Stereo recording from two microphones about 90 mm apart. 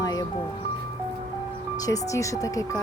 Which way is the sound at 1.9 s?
35° left (ahead or behind).